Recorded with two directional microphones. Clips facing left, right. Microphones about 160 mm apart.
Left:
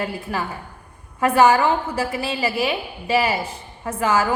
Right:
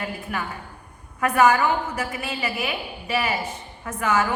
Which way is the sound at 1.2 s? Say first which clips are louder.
Left 3 dB; 30° left (ahead or behind).